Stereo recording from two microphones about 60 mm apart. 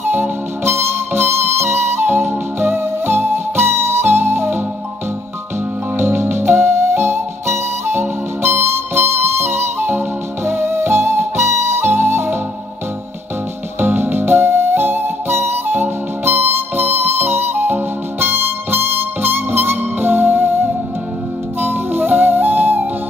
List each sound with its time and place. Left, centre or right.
0.0 s music: right
5.9 s music: right
13.7 s music: right
21.5 s music: right